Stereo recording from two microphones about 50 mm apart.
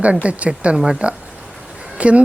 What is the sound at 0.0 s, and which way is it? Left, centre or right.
A woman's voice, right.